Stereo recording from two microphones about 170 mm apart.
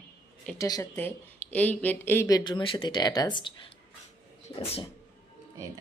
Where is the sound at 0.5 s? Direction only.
20° left (ahead or behind); by 4.9 s 35° left (ahead or behind).